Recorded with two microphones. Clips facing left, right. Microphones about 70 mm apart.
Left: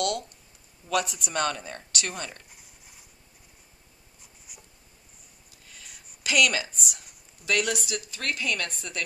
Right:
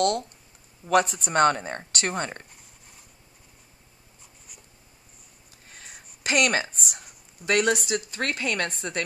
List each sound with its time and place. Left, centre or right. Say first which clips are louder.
0.0 s speech: right 5 dB; right
4.5 s writing: left 2 dB; centre
5.7 s a woman's voice: right 4 dB; right